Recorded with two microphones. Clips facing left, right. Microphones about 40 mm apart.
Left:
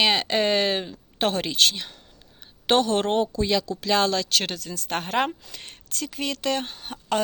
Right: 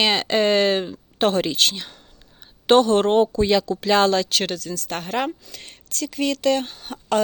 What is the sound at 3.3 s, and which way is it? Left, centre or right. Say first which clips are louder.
Speech: right 5 dB; right.